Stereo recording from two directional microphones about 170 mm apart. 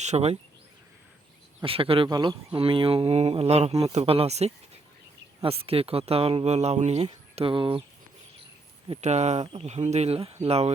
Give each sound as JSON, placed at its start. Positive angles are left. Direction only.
{"t": 0.0, "sound": "speech", "side_deg": -40}
{"t": 1.6, "sound": "speech", "side_deg": -30}
{"t": 9.0, "sound": "speech", "side_deg": -40}